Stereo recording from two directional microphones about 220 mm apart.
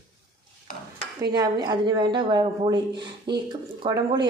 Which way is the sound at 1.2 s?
15° right (ahead or behind).